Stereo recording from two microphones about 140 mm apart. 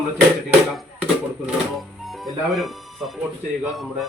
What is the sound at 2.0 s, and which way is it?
Speech, centre (ahead or behind).